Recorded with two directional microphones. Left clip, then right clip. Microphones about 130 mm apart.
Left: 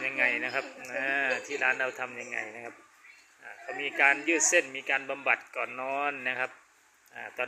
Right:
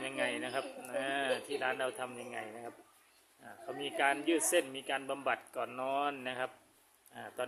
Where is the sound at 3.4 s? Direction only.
30° right (ahead or behind).